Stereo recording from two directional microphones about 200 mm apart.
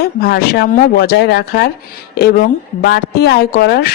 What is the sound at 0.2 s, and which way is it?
Speech, 50° left (ahead or behind).